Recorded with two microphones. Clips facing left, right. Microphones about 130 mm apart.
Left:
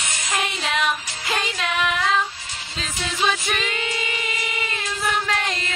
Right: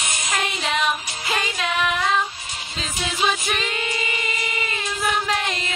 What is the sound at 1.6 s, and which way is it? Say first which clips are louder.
Female singing: right 1 dB; centre (ahead or behind).